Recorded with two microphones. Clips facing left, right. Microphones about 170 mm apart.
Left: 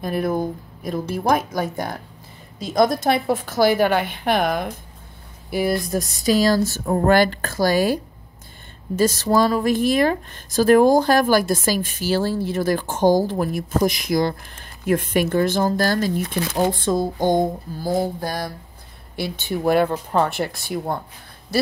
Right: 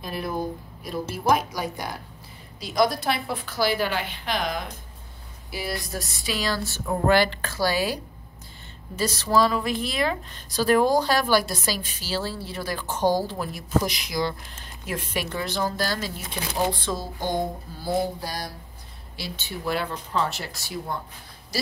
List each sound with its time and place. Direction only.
0.0 s speech: 50° left (ahead or behind)